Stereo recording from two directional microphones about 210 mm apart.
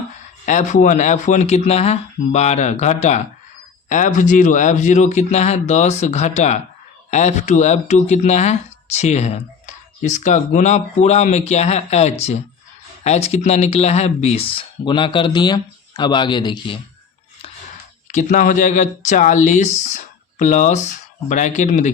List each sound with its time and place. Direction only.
0.4 s speech: 35° left (ahead or behind)
18.1 s speech: 35° left (ahead or behind)